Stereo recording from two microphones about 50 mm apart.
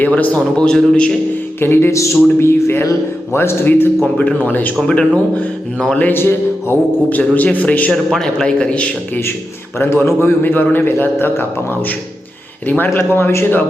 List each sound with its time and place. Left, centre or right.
0.0 s speech: left
0.5 s a man's voice: centre
1.6 s a man's voice: left
2.4 s a man's voice: left
4.0 s speech: left
4.8 s a man's voice: centre
6.0 s a man's voice: left
7.1 s speech: left
8.1 s a man's voice: centre
9.7 s a man's voice: left
12.9 s a man's voice: left